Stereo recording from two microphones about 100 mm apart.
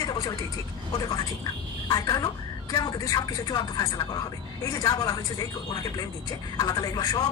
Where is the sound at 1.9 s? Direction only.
40° left (ahead or behind).